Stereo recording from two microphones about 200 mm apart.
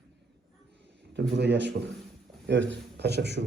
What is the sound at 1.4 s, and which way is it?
A man's voice, 60° right (ahead or behind).